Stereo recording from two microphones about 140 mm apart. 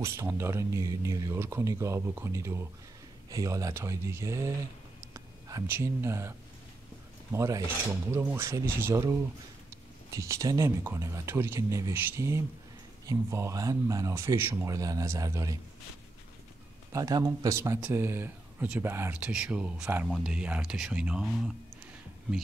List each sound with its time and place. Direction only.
0.0 s speech: 20° right (ahead or behind)
7.3 s speech: 25° right (ahead or behind)
16.9 s speech: 25° right (ahead or behind); by 21.5 s centre (ahead or behind)